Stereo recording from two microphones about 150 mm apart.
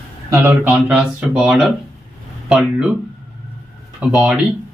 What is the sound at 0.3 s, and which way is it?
Speech, 20° right (ahead or behind).